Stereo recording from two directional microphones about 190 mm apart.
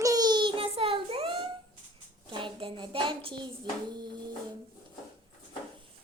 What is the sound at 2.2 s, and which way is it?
Hands, 25° right (ahead or behind).